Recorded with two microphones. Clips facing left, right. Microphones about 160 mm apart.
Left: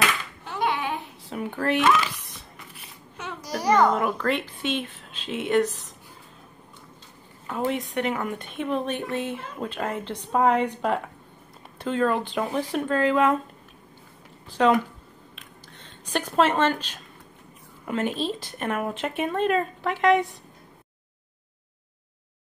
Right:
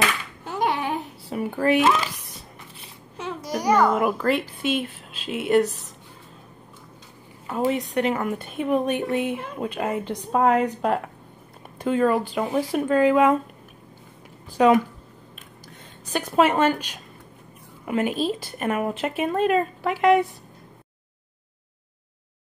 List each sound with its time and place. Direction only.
0.5 s a sound: 45° right (ahead or behind)
1.3 s speech: 5° right (ahead or behind)
1.8 s speech: 40° right (ahead or behind)
2.8 s a child's voice: 30° right (ahead or behind); by 5.7 s 5° right (ahead or behind)
7.4 s a woman's voice: 10° right (ahead or behind)
7.7 s speech: centre (ahead or behind)
14.6 s speech: 5° right (ahead or behind)
15.8 s a woman's voice: 10° right (ahead or behind)